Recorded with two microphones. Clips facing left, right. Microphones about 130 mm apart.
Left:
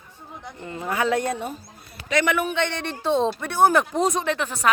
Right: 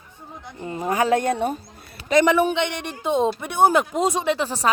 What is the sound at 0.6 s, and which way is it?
Speech, 20° right (ahead or behind).